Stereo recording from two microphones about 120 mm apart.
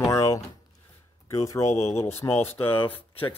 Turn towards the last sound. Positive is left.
turn(degrees=15)  # may be behind; listen again after turning